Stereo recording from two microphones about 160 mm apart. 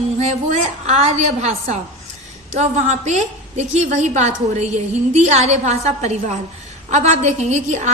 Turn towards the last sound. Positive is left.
turn(degrees=-45)  # may be behind; listen again after turning